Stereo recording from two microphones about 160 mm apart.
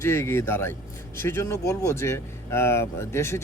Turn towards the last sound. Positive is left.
turn(degrees=15)  # may be behind; listen again after turning